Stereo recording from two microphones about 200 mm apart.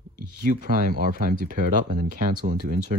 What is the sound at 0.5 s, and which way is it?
Speech, 45° right (ahead or behind).